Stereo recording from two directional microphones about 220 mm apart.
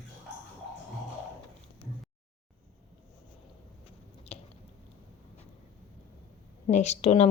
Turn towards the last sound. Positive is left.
turn(degrees=30)  # may be behind; listen again after turning